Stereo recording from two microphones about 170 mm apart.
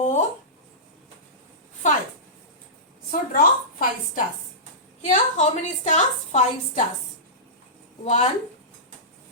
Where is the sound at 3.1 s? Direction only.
55° left (ahead or behind).